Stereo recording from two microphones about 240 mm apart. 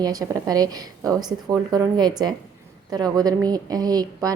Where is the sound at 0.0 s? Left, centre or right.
Centre.